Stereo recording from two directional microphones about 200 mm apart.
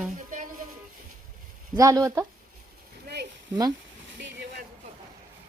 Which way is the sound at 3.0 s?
55° right (ahead or behind).